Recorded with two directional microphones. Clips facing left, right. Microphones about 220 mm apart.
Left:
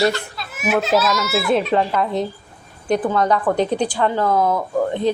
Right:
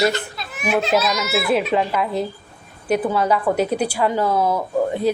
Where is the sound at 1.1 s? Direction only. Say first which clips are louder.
Left 1 dB; 15° right (ahead or behind).